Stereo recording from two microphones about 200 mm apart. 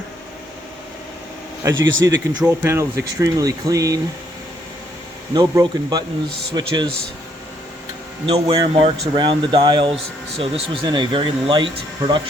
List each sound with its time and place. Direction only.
1.7 s speech: 70° right (ahead or behind)
2.4 s speech: 10° right (ahead or behind)
5.3 s speech: 20° right (ahead or behind)
8.3 s speech: 30° right (ahead or behind)